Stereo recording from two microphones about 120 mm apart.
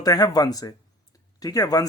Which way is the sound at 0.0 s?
30° left (ahead or behind).